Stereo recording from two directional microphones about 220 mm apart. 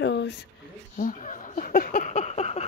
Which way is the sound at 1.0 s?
40° left (ahead or behind).